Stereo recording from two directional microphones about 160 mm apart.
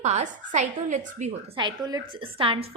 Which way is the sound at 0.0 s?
50° right (ahead or behind).